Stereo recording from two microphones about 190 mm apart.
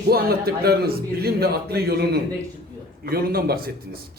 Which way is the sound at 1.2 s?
55° right (ahead or behind).